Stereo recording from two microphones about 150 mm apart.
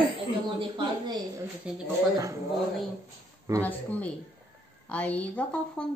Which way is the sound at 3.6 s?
10° left (ahead or behind).